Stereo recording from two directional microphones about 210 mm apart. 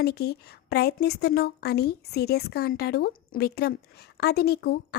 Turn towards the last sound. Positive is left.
turn(degrees=50)  # may be behind; listen again after turning